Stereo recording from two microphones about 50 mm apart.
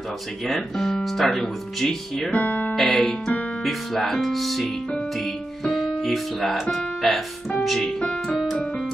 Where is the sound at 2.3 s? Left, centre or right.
Left.